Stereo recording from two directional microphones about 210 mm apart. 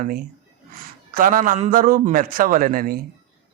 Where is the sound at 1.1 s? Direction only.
40° right (ahead or behind).